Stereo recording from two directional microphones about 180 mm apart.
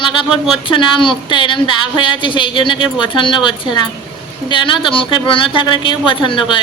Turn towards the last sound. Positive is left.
turn(degrees=25)  # may be behind; listen again after turning